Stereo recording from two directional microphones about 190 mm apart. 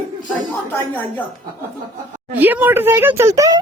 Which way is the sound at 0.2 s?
45° right (ahead or behind).